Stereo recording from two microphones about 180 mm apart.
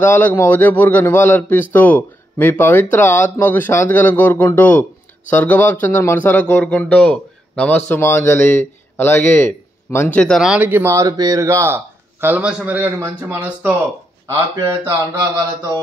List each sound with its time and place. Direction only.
0.0 s a man's voice: 10° left (ahead or behind); by 15.8 s 25° right (ahead or behind)